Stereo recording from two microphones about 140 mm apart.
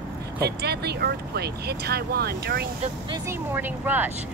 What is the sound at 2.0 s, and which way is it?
Speech, 90° right.